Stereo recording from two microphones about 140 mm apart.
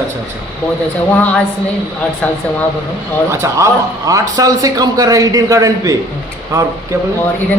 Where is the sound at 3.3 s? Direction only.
20° right (ahead or behind).